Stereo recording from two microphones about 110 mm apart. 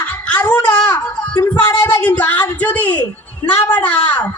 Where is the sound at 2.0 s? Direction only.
15° left (ahead or behind).